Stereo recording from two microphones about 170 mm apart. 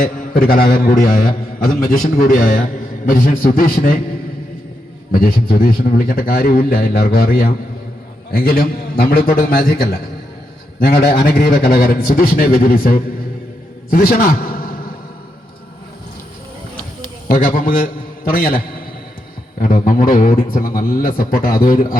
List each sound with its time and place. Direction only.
0.0 s a man's voice: 55° left (ahead or behind)
5.1 s a man's voice: 60° left (ahead or behind)
17.2 s a man's voice: 55° left (ahead or behind)